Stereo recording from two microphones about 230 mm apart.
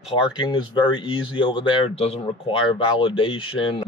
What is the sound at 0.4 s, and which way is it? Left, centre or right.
Speech, centre.